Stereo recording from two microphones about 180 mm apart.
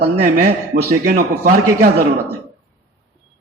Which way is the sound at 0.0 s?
60° right (ahead or behind).